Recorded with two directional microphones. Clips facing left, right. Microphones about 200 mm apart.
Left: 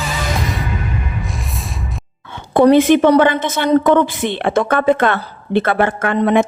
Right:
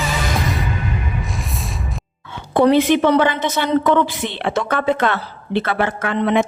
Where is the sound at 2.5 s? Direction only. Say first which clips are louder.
Left 4 dB; 50° left (ahead or behind).